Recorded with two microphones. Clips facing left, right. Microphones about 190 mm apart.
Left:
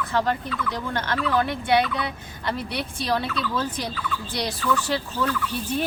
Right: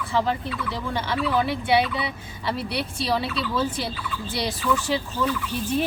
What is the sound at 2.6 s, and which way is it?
Speech, 45° left (ahead or behind).